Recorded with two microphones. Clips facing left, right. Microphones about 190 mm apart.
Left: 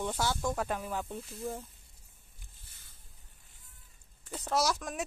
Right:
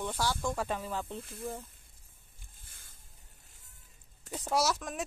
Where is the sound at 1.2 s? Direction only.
55° right (ahead or behind).